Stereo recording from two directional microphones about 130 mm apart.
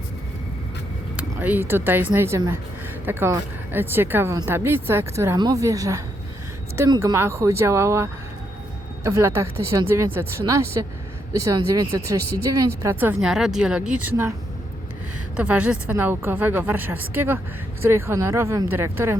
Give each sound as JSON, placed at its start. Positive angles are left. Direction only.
{"t": 1.1, "sound": "a woman's voice", "side_deg": -15}
{"t": 13.2, "sound": "a woman's voice", "side_deg": -5}
{"t": 15.4, "sound": "a woman's voice", "side_deg": -10}